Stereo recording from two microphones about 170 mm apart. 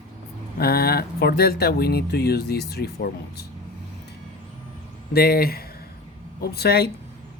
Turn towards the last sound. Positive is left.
turn(degrees=70)  # may be behind; listen again after turning